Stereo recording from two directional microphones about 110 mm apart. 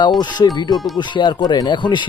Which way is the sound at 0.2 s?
40° left (ahead or behind).